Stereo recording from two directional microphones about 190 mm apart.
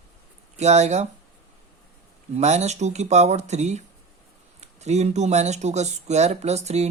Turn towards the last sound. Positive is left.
turn(degrees=-35)  # may be behind; listen again after turning